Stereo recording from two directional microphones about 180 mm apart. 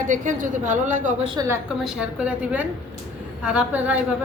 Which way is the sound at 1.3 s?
15° right (ahead or behind).